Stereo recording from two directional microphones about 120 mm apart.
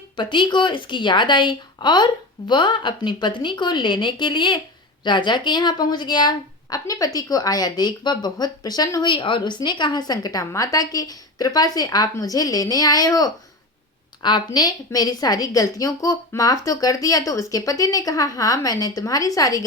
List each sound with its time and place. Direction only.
0.2 s a woman's voice: 40° left (ahead or behind)